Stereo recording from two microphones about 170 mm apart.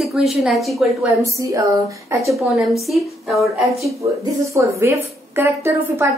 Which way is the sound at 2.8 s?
Centre (ahead or behind).